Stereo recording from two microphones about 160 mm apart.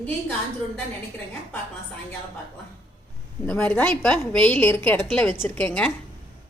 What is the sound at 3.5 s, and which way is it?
A woman's voice, 10° left (ahead or behind).